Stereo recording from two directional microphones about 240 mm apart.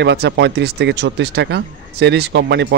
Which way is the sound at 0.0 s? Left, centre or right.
Right.